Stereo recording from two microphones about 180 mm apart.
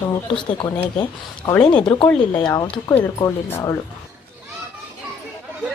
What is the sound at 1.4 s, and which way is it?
Speech, 10° left (ahead or behind).